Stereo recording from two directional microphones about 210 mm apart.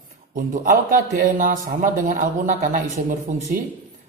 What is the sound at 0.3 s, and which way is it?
Speech, 40° right (ahead or behind).